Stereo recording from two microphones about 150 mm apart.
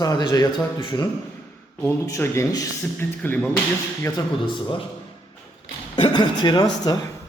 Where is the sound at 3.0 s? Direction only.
10° left (ahead or behind).